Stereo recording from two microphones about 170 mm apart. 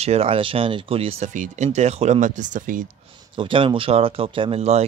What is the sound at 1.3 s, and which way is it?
Speech, 45° right (ahead or behind).